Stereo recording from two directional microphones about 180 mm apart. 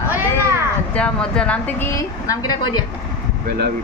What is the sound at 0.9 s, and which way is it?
A woman's voice, 5° left (ahead or behind).